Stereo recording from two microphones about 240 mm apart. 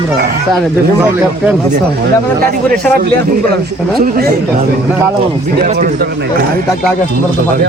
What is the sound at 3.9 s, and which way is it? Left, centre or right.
Speech, right.